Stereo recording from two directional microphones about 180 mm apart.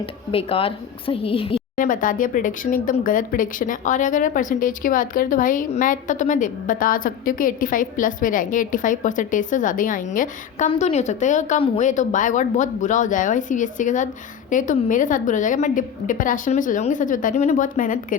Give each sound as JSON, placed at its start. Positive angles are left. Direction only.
{"t": 0.0, "sound": "a woman's voice", "side_deg": 30}
{"t": 1.8, "sound": "a woman's voice", "side_deg": 50}